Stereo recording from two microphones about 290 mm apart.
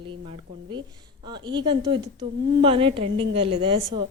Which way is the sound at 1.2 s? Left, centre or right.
Centre.